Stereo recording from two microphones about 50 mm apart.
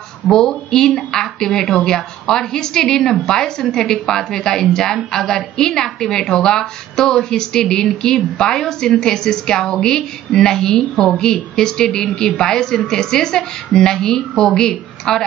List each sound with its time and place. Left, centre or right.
0.5 s a woman's voice: centre